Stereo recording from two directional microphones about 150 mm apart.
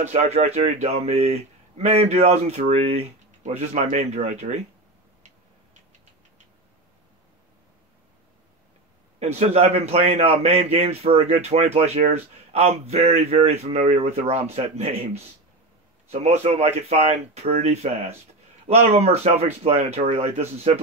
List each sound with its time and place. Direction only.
0.1 s a man's voice: 45° right (ahead or behind)
9.2 s a man's voice: 45° right (ahead or behind)
16.1 s a man's voice: 45° right (ahead or behind)